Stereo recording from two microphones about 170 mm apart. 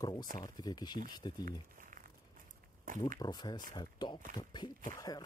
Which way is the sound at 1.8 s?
55° right (ahead or behind).